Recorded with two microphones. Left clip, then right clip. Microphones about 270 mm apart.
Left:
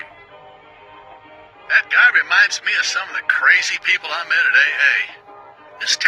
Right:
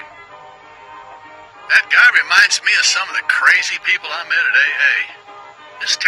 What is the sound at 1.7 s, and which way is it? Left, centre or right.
A man's voice, right.